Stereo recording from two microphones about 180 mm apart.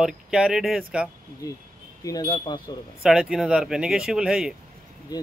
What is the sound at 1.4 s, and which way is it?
Speech, 20° left (ahead or behind).